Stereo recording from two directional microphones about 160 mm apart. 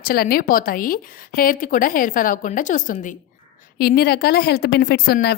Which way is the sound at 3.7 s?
70° left (ahead or behind).